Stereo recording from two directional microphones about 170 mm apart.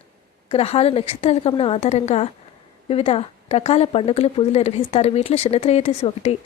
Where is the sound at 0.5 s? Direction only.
35° left (ahead or behind).